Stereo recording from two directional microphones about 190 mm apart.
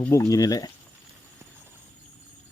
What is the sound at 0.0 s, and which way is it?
Speech, 15° left (ahead or behind).